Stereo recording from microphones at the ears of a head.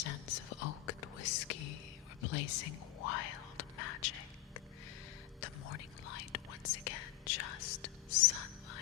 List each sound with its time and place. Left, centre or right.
0.0 s whispering: left